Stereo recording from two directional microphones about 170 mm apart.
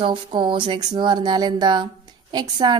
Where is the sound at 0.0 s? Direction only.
30° right (ahead or behind).